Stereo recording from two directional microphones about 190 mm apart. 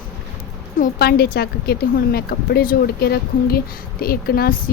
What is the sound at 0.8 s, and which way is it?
A woman's voice, 55° left (ahead or behind).